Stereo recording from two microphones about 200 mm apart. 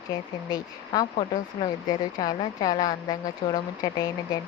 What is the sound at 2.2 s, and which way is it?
Speech, 20° left (ahead or behind).